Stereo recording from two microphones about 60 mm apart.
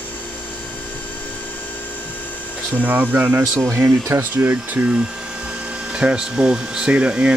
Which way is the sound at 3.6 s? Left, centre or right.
Right.